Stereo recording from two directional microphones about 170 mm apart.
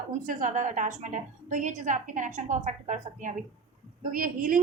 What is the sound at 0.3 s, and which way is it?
A woman's voice, 50° right (ahead or behind).